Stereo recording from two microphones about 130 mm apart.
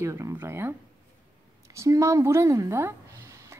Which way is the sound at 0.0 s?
20° right (ahead or behind).